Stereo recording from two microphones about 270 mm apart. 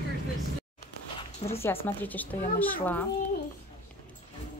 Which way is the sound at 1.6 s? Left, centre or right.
Centre.